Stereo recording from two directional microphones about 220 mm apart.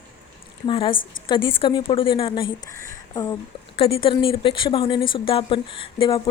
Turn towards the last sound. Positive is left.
turn(degrees=25)  # may be behind; listen again after turning